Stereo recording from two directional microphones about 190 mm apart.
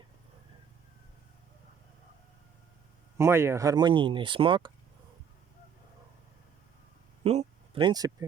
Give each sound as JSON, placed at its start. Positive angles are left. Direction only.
{"t": 3.2, "sound": "speech", "side_deg": -15}
{"t": 7.3, "sound": "speech", "side_deg": -30}